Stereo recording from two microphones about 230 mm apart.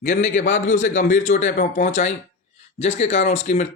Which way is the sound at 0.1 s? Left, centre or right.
Left.